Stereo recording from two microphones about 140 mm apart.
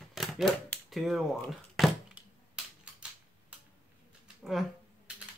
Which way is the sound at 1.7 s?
Centre (ahead or behind).